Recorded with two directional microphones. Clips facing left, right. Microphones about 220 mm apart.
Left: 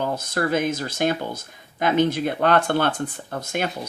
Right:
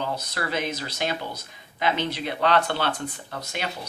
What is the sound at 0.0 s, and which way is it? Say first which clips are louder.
Speech: left 6 dB; 50° left (ahead or behind).